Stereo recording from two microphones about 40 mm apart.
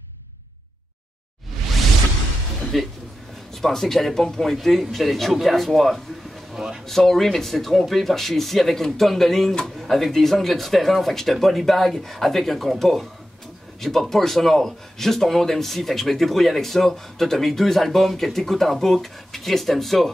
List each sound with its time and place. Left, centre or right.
2.7 s speech: centre
6.5 s speech: centre
6.9 s speech: centre